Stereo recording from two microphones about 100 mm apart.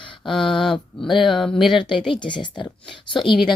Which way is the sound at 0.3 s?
Centre (ahead or behind).